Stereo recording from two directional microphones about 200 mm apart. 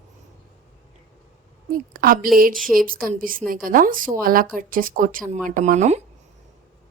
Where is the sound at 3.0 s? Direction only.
45° right (ahead or behind).